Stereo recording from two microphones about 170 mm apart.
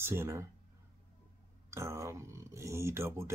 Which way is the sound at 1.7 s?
15° right (ahead or behind).